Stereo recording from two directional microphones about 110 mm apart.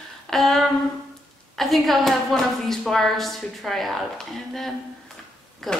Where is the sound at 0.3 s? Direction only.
Centre (ahead or behind).